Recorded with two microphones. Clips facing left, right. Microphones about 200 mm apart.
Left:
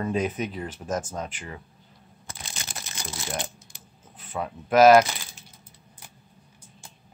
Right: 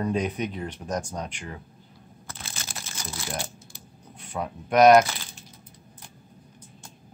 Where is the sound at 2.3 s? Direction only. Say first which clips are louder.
Even; 15° left (ahead or behind).